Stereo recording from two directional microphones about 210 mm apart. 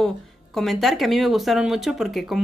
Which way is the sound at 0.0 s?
Centre (ahead or behind).